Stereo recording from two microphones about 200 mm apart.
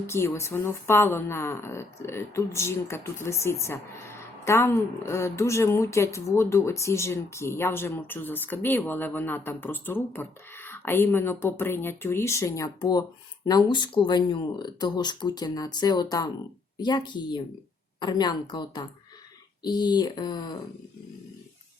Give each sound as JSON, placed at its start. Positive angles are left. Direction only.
{"t": 0.1, "sound": "a woman's voice", "side_deg": 15}